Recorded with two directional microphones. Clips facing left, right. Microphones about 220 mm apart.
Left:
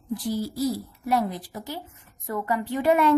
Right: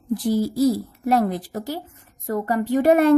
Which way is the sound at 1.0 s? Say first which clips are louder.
Right 5 dB; 55° right (ahead or behind).